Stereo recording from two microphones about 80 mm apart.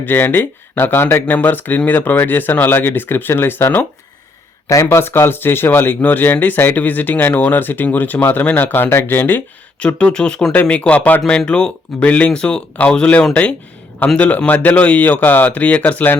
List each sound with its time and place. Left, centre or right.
0.0 s speech: left
4.7 s speech: left
9.8 s speech: centre